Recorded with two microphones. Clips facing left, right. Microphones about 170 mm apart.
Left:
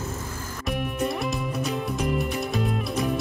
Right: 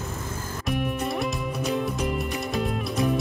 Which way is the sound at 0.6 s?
Centre (ahead or behind).